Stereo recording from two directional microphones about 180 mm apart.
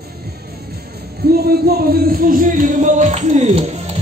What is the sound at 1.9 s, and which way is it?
Speech, 55° right (ahead or behind).